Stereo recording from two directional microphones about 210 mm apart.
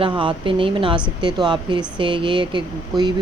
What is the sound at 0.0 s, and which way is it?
Speech, 25° right (ahead or behind).